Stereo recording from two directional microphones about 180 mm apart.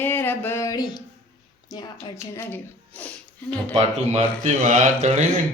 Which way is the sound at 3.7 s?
40° right (ahead or behind).